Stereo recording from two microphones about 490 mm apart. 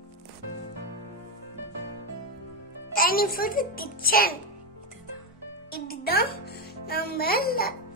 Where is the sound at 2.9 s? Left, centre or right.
Centre.